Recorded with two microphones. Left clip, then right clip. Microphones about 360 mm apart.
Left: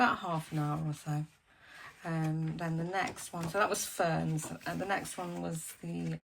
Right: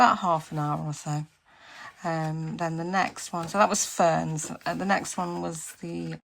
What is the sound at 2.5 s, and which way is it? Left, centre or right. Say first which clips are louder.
Speech: right 10 dB; centre.